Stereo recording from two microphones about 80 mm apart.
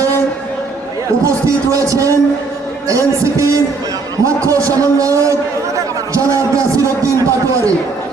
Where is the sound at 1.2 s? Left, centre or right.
Right.